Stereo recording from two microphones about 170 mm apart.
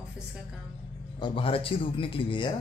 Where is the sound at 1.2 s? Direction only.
30° left (ahead or behind).